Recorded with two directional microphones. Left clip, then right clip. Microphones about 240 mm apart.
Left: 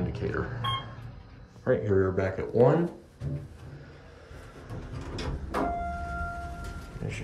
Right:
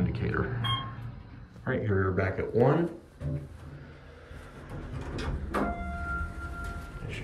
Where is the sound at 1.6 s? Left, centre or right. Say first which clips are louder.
Left 5 dB; centre.